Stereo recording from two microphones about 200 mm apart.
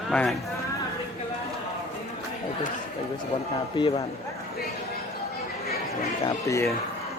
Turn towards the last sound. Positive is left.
turn(degrees=15)  # may be behind; listen again after turning